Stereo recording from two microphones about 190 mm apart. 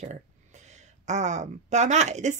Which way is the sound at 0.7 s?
40° right (ahead or behind).